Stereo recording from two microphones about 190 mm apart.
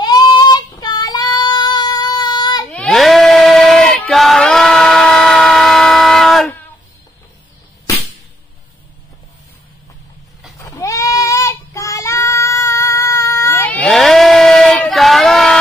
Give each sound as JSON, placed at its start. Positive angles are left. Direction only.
{"t": 0.0, "sound": "child singing", "side_deg": 20}
{"t": 2.7, "sound": "a sound", "side_deg": 5}
{"t": 10.6, "sound": "child singing", "side_deg": 15}